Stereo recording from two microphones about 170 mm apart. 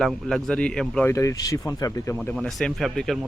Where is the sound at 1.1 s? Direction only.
20° left (ahead or behind).